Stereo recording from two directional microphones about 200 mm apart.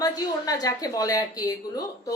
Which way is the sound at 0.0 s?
20° left (ahead or behind).